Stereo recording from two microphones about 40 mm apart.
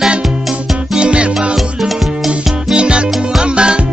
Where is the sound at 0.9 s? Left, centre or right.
Right.